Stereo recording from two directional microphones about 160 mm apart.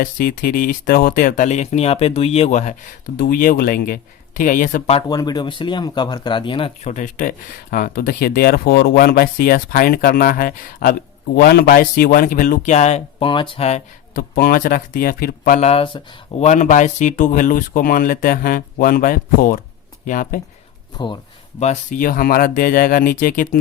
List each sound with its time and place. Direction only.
0.0 s speech: 65° left (ahead or behind)
3.2 s speech: 65° left (ahead or behind)
5.0 s speech: 25° left (ahead or behind)
6.9 s speech: 55° left (ahead or behind)
11.3 s speech: 75° left (ahead or behind); by 13.2 s 45° left (ahead or behind)
13.2 s speech: 30° left (ahead or behind)
14.2 s speech: 70° left (ahead or behind)
15.6 s speech: 35° left (ahead or behind)
16.5 s speech: 50° left (ahead or behind)
21.6 s speech: 50° left (ahead or behind)